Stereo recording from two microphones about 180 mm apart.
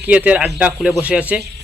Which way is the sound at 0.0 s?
10° right (ahead or behind).